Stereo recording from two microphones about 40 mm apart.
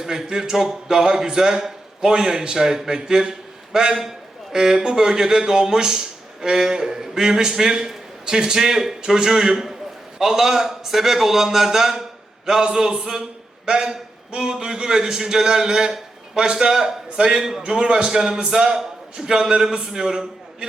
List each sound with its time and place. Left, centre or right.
0.0 s speech: centre